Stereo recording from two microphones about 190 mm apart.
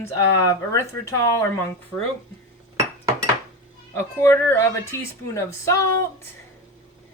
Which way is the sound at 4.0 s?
10° left (ahead or behind).